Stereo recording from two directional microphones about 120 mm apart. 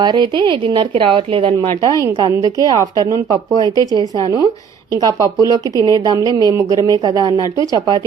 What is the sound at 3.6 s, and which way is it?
Speech, 30° left (ahead or behind).